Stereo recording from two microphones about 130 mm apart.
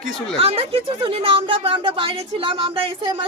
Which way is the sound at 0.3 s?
50° right (ahead or behind).